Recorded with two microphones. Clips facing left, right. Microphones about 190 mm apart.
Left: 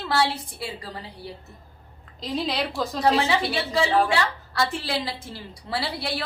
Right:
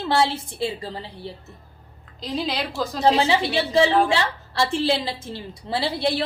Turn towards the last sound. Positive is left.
turn(degrees=-25)  # may be behind; listen again after turning